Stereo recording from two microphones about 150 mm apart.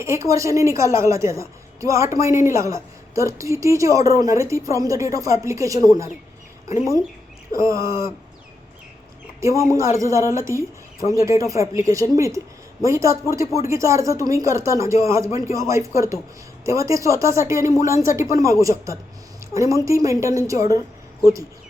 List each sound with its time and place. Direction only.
0.0 s a woman's voice: 20° right (ahead or behind)
9.4 s a woman's voice: 20° right (ahead or behind)
19.5 s a woman's voice: 20° right (ahead or behind)